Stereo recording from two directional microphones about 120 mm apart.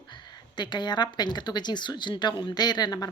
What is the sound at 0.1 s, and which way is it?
Speech, 40° left (ahead or behind).